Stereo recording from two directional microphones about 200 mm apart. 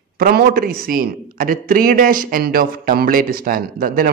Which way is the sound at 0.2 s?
50° right (ahead or behind).